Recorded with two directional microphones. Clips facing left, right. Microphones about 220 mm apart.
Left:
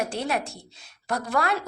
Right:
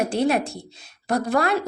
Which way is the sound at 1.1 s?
35° right (ahead or behind).